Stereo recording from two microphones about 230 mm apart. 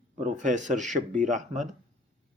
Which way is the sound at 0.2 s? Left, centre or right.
Right.